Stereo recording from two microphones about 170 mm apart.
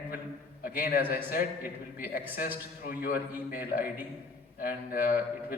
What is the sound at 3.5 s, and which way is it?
A man's voice, 60° left (ahead or behind).